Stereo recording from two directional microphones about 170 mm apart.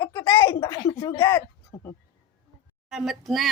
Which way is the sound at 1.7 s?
15° left (ahead or behind).